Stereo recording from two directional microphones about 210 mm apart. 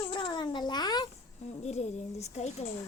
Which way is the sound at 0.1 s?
25° left (ahead or behind).